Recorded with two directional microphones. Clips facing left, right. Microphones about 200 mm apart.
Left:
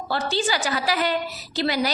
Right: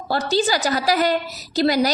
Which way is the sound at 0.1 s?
40° right (ahead or behind).